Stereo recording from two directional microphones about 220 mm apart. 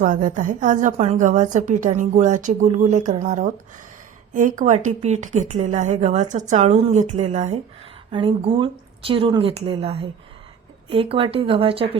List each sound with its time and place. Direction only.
0.0 s a woman's voice: 35° right (ahead or behind)